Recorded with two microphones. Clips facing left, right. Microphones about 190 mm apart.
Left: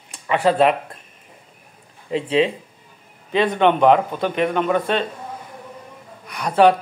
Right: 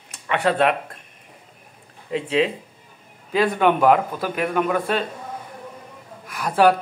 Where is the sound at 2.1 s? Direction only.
35° left (ahead or behind).